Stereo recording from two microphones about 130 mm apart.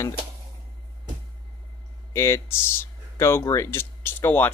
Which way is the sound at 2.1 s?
20° left (ahead or behind).